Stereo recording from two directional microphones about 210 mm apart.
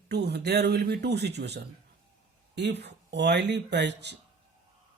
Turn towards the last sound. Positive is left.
turn(degrees=-55)  # may be behind; listen again after turning